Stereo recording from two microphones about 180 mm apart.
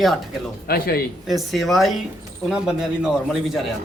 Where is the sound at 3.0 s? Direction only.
Centre (ahead or behind).